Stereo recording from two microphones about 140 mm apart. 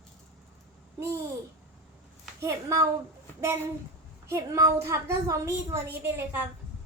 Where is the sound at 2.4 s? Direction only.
20° right (ahead or behind).